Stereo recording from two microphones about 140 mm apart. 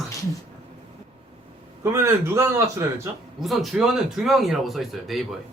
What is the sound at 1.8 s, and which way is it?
A man's voice, 20° right (ahead or behind).